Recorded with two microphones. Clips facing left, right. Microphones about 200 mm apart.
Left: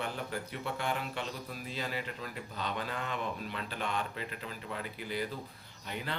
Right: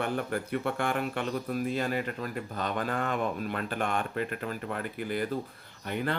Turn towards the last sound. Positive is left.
turn(degrees=-55)  # may be behind; listen again after turning